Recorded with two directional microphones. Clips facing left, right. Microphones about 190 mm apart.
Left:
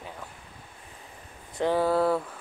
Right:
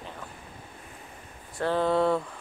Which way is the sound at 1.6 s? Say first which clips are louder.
Left 1 dB; 10° left (ahead or behind).